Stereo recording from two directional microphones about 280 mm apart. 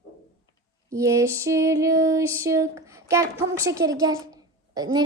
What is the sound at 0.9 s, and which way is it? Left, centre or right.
Female singing, centre.